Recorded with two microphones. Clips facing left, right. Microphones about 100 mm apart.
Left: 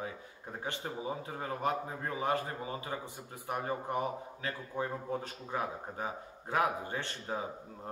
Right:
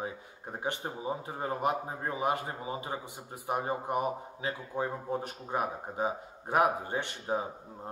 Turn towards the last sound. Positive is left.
turn(degrees=-20)  # may be behind; listen again after turning